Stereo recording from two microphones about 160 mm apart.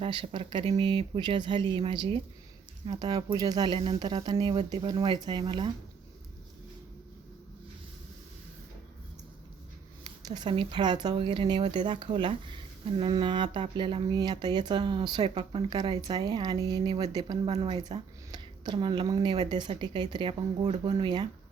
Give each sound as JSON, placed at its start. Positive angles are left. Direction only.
{"t": 0.0, "sound": "speech", "side_deg": -35}
{"t": 10.0, "sound": "speech", "side_deg": -25}